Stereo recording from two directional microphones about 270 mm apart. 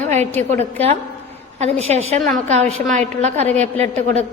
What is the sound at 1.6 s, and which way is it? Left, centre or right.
Speech, right.